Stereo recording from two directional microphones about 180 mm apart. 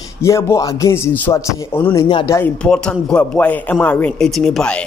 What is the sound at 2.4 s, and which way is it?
Speech, 5° left (ahead or behind).